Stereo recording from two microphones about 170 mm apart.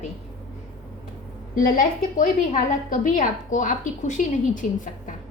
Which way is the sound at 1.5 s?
55° left (ahead or behind).